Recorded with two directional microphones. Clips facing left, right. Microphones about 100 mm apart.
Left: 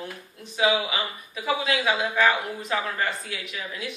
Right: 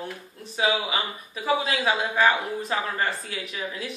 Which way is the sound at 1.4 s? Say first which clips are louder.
Right 1 dB; 30° right (ahead or behind).